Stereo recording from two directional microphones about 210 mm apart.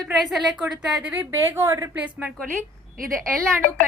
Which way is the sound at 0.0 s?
Centre (ahead or behind).